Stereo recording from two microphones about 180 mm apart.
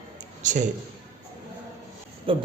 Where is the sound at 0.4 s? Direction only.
45° right (ahead or behind).